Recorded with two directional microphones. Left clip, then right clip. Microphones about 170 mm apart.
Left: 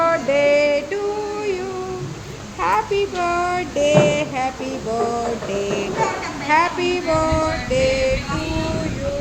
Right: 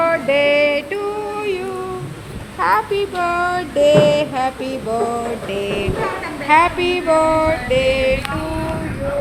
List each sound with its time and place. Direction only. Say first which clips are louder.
0.0 s a sound: right 1 dB; centre (ahead or behind)
2.6 s speech: right 2 dB; centre (ahead or behind)
4.0 s music: right 4 dB; 5° right (ahead or behind)
5.5 s speech: right 1 dB; centre (ahead or behind)
6.5 s music: right 4 dB; 15° right (ahead or behind)
6.9 s speech: right 4 dB; 5° right (ahead or behind)